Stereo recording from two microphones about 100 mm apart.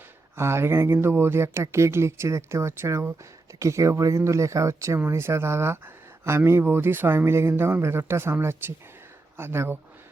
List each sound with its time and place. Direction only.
0.3 s speech: 25° right (ahead or behind)